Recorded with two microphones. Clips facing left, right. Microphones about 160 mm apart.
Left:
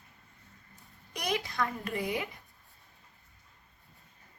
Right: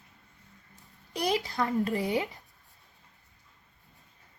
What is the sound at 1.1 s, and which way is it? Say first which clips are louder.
Speech: right 5 dB; 30° right (ahead or behind).